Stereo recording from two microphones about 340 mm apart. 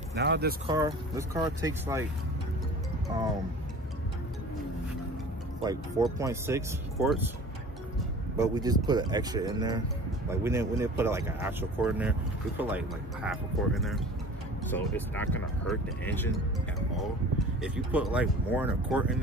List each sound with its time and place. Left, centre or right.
0.1 s speech: right
0.7 s speech: centre
5.6 s speech: centre
8.4 s speech: centre
17.6 s speech: centre